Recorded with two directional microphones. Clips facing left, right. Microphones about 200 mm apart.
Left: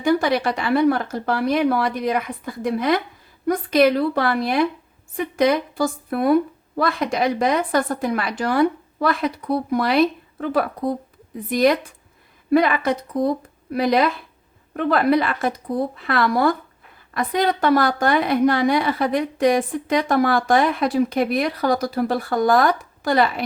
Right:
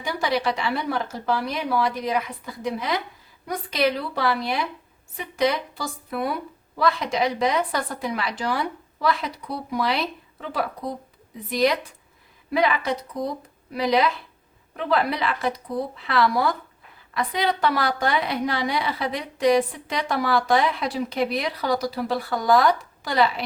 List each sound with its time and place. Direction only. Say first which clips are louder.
0.0 s a woman's voice: left 6 dB; 50° left (ahead or behind)